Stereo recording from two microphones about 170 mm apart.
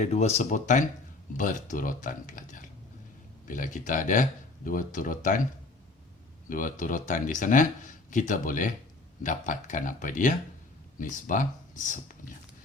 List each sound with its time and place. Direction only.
0.0 s speech: 40° left (ahead or behind)
6.5 s speech: 50° left (ahead or behind)